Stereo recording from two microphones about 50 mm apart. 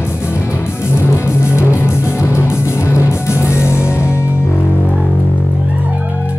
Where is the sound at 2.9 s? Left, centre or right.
Left.